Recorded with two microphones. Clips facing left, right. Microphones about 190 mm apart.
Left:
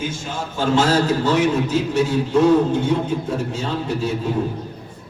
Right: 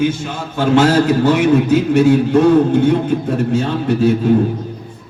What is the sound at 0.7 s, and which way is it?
A man's voice, 60° right (ahead or behind).